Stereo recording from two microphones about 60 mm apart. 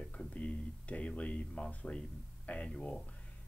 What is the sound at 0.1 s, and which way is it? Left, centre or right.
Speech, left.